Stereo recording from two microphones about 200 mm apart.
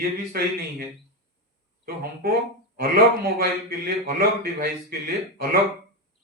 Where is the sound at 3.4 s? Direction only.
45° right (ahead or behind).